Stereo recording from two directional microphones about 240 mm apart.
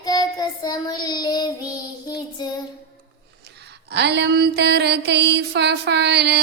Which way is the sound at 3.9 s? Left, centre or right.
Right.